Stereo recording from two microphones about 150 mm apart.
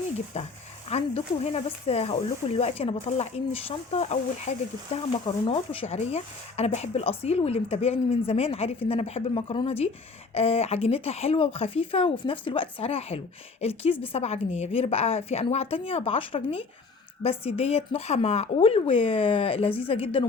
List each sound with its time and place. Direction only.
0.3 s speech: 45° left (ahead or behind)